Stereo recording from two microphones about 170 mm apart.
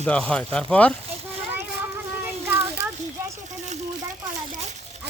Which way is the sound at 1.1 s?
40° right (ahead or behind).